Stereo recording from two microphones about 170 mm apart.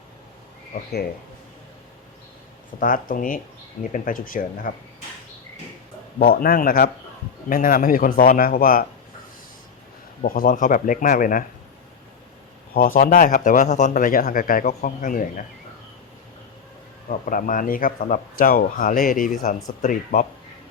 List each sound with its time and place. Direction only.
2.8 s speech: 55° left (ahead or behind)
6.1 s speech: 60° left (ahead or behind)
10.2 s speech: 55° left (ahead or behind)
12.7 s speech: 55° left (ahead or behind)
17.1 s speech: 55° left (ahead or behind)